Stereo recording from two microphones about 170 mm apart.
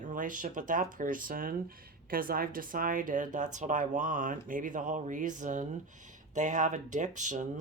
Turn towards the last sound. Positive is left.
turn(degrees=-45)  # may be behind; listen again after turning